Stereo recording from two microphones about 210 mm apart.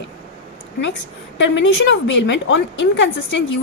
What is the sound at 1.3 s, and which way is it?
A woman's voice, 60° left (ahead or behind).